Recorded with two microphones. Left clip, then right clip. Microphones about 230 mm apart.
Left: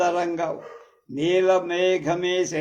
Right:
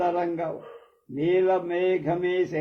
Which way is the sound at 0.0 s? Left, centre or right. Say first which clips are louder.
Left 3 dB; left.